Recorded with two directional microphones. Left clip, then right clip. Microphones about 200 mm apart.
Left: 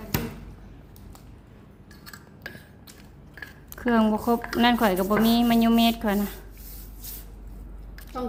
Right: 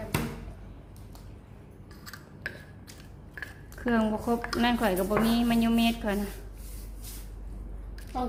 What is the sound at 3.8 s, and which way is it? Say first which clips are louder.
A woman's voice: left 5 dB; 15° left (ahead or behind).